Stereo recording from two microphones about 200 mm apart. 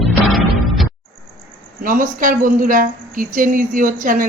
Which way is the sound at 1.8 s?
45° right (ahead or behind).